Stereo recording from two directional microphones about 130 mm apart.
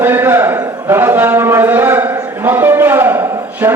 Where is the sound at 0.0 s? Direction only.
15° right (ahead or behind).